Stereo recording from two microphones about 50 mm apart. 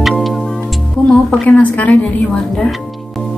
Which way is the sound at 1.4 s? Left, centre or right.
Left.